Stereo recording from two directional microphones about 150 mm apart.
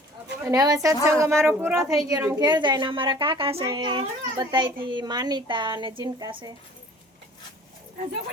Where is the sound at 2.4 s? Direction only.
30° right (ahead or behind).